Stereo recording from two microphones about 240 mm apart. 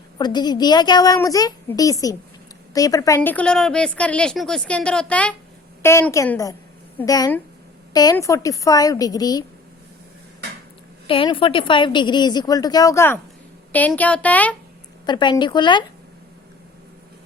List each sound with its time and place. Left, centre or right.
0.2 s a woman's voice: centre
11.0 s a woman's voice: left; by 14.5 s centre
15.0 s a woman's voice: centre